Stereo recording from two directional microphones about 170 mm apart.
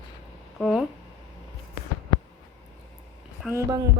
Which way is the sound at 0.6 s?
5° left (ahead or behind).